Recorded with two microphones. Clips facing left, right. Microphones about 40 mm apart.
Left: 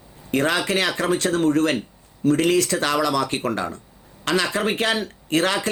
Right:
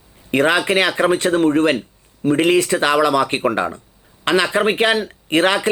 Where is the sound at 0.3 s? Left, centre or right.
Right.